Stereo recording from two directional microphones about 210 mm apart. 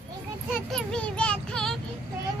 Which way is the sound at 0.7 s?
5° left (ahead or behind).